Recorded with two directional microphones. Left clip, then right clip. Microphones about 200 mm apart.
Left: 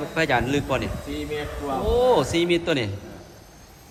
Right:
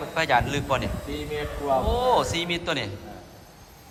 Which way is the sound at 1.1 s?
55° right (ahead or behind).